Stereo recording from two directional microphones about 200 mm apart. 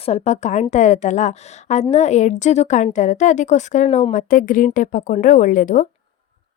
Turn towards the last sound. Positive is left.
turn(degrees=40)  # may be behind; listen again after turning